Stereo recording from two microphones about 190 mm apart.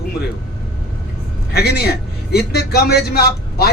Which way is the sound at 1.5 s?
55° left (ahead or behind).